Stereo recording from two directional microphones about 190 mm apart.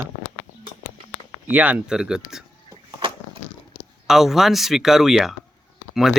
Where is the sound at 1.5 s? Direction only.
10° right (ahead or behind).